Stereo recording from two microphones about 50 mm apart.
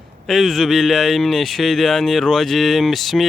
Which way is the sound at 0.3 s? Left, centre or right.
Centre.